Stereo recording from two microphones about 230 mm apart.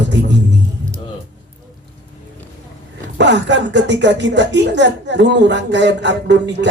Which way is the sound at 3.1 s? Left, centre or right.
Right.